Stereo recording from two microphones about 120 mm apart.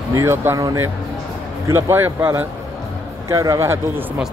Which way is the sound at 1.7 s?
20° right (ahead or behind).